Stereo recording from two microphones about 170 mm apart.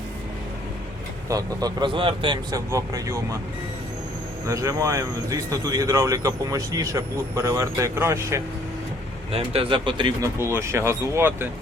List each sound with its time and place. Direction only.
1.3 s speech: 20° right (ahead or behind)
4.4 s speech: 20° right (ahead or behind)
9.3 s speech: 35° right (ahead or behind)
10.4 s speech: 15° right (ahead or behind)